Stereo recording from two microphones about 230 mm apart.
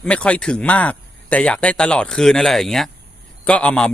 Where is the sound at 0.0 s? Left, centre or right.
Centre.